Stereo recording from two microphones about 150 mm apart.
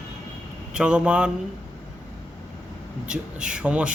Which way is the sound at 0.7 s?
5° right (ahead or behind).